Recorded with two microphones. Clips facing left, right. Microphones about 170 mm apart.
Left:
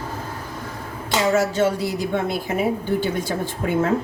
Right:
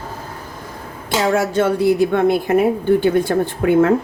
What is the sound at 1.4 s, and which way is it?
A woman's voice, 55° right (ahead or behind).